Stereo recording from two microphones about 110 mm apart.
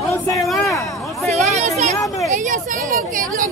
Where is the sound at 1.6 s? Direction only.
90° right.